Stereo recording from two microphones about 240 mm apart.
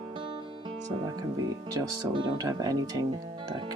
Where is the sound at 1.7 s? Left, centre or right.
Centre.